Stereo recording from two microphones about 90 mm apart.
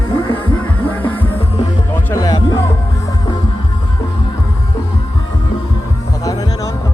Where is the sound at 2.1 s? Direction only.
45° left (ahead or behind).